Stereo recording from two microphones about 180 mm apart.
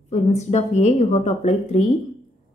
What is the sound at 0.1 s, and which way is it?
A woman's voice, 40° left (ahead or behind).